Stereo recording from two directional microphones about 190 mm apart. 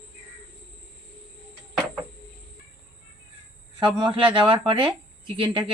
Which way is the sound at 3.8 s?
25° right (ahead or behind).